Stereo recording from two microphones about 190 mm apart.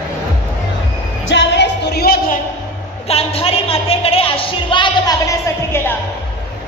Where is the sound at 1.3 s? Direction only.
70° left (ahead or behind).